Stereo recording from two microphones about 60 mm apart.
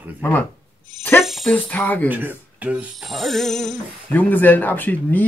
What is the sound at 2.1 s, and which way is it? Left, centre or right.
Speech, right.